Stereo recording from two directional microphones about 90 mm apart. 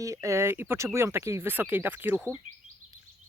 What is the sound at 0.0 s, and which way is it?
Speech, 35° right (ahead or behind).